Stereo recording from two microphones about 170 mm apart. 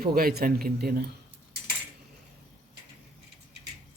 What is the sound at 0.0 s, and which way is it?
Speech, 65° right (ahead or behind).